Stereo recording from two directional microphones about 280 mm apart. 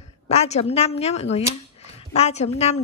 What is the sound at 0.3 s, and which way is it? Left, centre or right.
A woman's voice, left.